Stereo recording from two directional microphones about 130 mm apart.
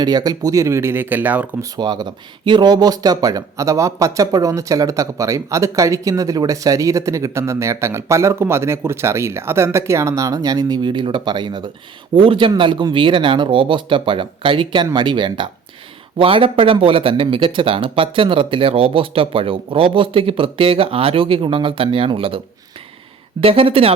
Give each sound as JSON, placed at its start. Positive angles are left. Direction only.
{"t": 0.0, "sound": "speech", "side_deg": -30}
{"t": 1.7, "sound": "speech", "side_deg": -35}
{"t": 23.4, "sound": "speech", "side_deg": -45}